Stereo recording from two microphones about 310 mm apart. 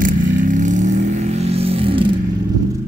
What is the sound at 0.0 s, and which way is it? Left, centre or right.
Vehicle, right.